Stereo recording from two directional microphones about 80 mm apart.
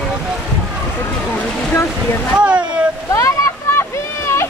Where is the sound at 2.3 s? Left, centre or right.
Centre.